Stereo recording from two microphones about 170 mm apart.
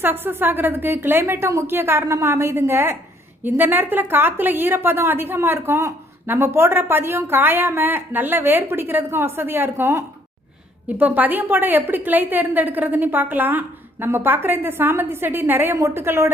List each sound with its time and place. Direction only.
0.0 s a woman's voice: 10° right (ahead or behind)